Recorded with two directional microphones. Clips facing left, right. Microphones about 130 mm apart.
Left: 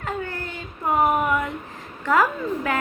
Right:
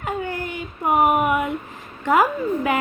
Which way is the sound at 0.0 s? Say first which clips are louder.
Right 3 dB; 15° right (ahead or behind).